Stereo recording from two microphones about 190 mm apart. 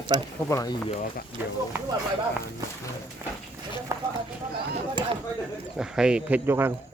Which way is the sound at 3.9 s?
15° right (ahead or behind).